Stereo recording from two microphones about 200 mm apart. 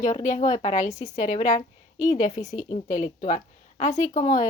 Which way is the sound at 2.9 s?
40° left (ahead or behind).